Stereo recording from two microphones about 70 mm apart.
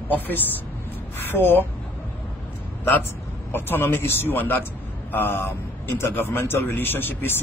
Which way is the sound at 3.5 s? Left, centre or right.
Left.